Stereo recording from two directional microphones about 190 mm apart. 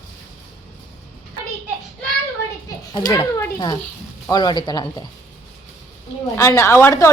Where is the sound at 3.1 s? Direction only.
15° left (ahead or behind).